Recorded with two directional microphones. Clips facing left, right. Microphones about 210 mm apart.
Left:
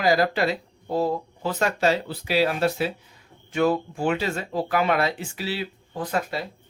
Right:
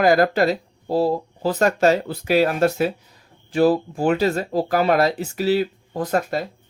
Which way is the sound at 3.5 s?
35° right (ahead or behind).